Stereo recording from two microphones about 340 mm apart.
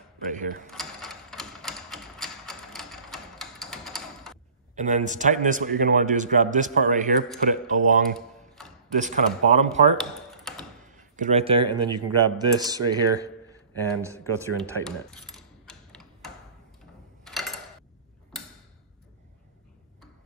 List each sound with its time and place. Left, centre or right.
0.2 s speech: right
0.7 s typewriter: centre
4.7 s a man's voice: right
9.9 s a sound: centre
10.9 s speech: right
14.4 s a sound: centre